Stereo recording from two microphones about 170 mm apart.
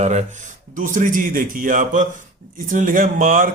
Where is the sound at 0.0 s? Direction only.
45° right (ahead or behind).